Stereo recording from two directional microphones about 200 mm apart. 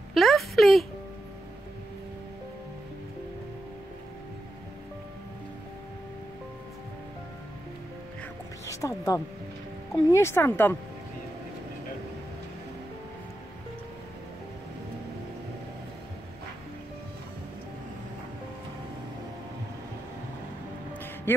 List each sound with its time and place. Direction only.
0.1 s a woman's voice: centre (ahead or behind)
8.6 s a sound: 15° left (ahead or behind)
9.9 s speech: 15° left (ahead or behind)